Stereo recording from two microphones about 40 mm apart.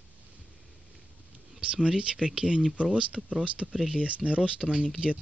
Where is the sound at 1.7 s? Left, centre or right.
Right.